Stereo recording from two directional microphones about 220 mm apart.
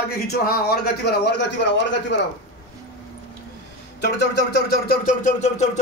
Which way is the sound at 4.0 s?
50° left (ahead or behind).